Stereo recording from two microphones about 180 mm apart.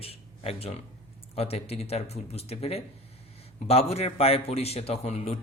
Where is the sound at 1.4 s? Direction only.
35° left (ahead or behind).